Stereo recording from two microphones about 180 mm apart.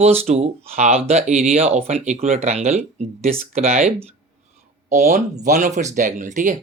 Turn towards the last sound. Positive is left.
turn(degrees=-45)  # may be behind; listen again after turning